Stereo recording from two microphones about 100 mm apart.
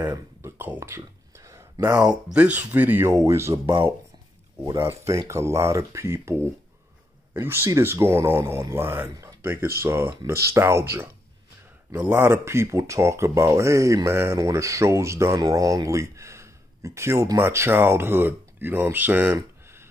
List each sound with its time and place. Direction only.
0.0 s a sound: 20° right (ahead or behind)
2.3 s speech: 15° right (ahead or behind)
3.6 s speech: 55° right (ahead or behind)
4.8 s speech: 30° right (ahead or behind)
7.3 s speech: 25° right (ahead or behind)
19.3 s a sound: 25° right (ahead or behind)